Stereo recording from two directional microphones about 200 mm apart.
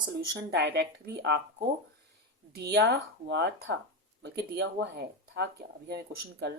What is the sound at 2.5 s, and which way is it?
Speech, 55° right (ahead or behind).